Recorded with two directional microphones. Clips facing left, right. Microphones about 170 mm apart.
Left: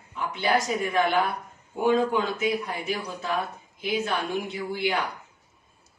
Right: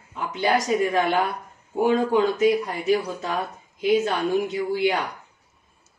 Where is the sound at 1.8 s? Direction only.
35° right (ahead or behind).